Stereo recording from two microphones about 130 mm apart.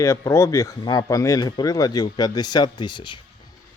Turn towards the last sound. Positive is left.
turn(degrees=35)  # may be behind; listen again after turning